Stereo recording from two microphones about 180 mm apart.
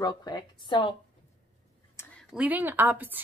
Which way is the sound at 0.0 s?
25° left (ahead or behind).